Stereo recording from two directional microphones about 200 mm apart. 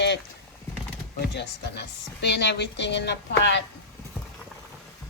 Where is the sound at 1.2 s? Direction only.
55° left (ahead or behind).